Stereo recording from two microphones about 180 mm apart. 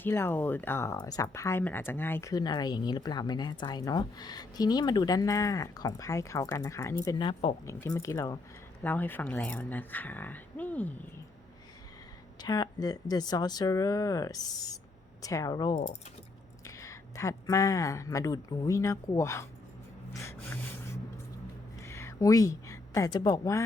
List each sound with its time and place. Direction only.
0.0 s speech: 10° left (ahead or behind)
7.7 s speech: 15° left (ahead or behind)
12.4 s speech: 20° left (ahead or behind)
20.2 s gasp: 15° left (ahead or behind)
21.8 s a sound: 15° left (ahead or behind)